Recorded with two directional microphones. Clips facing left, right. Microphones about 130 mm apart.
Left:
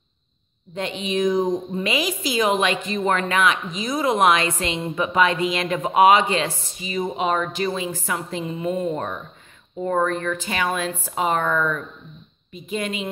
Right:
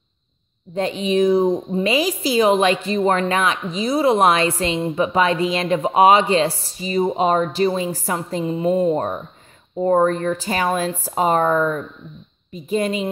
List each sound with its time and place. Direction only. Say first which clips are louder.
0.7 s speech: right 6 dB; 35° right (ahead or behind)